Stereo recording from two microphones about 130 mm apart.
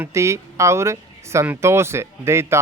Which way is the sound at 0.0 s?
20° right (ahead or behind).